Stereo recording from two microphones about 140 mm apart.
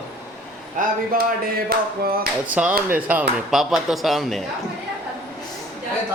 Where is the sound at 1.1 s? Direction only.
90° right.